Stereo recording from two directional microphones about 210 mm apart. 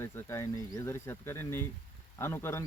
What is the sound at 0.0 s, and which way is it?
Speech, 10° left (ahead or behind).